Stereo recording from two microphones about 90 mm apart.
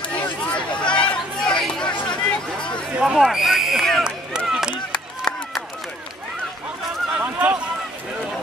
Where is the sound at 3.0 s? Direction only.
5° right (ahead or behind).